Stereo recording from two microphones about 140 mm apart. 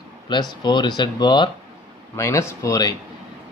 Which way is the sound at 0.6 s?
30° left (ahead or behind).